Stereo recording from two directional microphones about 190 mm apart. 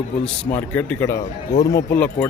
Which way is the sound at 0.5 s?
10° left (ahead or behind).